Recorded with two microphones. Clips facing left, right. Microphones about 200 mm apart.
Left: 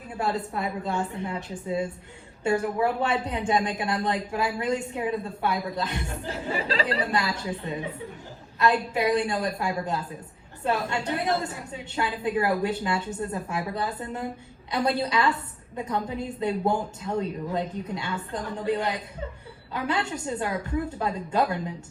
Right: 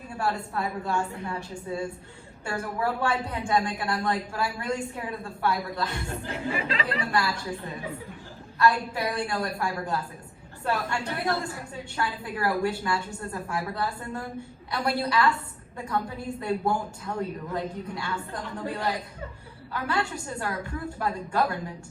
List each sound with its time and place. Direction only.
0.2 s a woman's voice: 20° left (ahead or behind)
6.2 s speech: 35° left (ahead or behind)
7.1 s a woman's voice: 20° left (ahead or behind)